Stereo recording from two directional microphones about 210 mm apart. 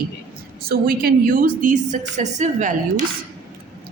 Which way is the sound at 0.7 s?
45° right (ahead or behind).